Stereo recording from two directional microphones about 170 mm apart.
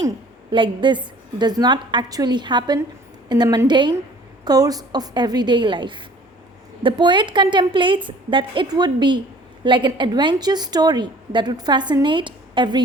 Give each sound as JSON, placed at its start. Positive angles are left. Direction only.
{"t": 0.5, "sound": "a woman's voice", "side_deg": -30}